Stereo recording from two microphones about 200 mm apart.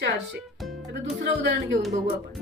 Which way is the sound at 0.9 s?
60° right (ahead or behind).